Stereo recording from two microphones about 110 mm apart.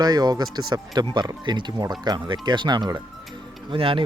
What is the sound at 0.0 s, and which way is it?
Speech, 40° right (ahead or behind).